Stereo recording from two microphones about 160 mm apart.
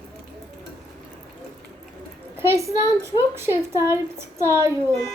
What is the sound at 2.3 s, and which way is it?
A woman's voice, 15° right (ahead or behind).